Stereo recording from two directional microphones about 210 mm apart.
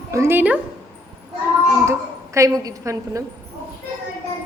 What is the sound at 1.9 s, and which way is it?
A woman's voice, 15° right (ahead or behind).